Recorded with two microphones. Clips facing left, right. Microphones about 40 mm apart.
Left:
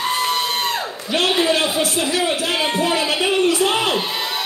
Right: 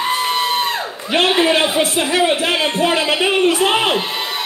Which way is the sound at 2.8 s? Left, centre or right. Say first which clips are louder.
Right 3 dB; right.